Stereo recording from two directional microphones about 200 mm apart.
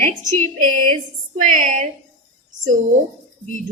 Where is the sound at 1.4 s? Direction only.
35° right (ahead or behind).